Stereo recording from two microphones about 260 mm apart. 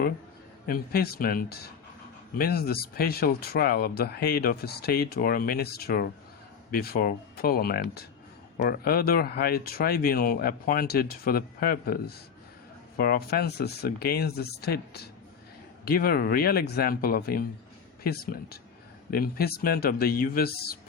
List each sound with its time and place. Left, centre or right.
0.7 s speech: left